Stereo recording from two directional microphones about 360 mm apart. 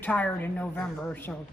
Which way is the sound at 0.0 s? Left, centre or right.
Centre.